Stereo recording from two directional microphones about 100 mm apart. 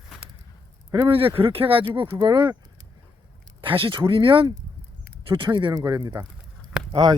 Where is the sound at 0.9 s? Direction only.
60° right (ahead or behind).